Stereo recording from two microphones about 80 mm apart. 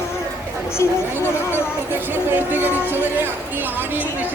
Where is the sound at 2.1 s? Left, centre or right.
Right.